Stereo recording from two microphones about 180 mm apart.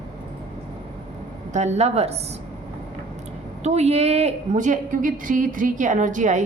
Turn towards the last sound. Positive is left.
turn(degrees=-45)  # may be behind; listen again after turning